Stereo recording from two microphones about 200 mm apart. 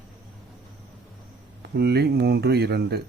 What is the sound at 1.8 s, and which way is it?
Speech, 55° right (ahead or behind).